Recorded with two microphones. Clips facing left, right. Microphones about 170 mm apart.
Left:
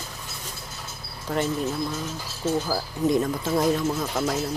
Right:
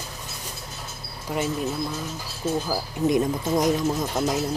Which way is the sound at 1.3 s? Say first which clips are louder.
Left 1 dB; 10° right (ahead or behind).